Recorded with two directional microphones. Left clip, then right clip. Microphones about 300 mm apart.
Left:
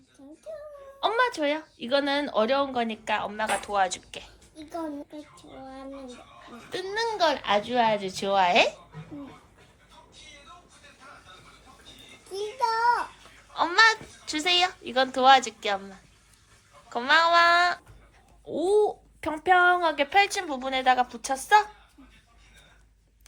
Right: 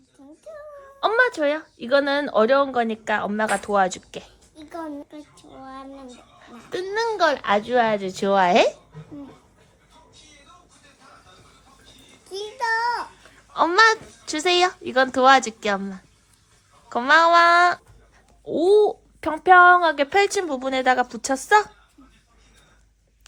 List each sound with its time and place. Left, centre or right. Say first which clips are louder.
0.9 s speech: right 5 dB; right
6.4 s speech: right 5 dB; right
12.3 s child singing: right 3 dB; centre
13.5 s speech: right 4 dB; right
16.9 s speech: right 5 dB; right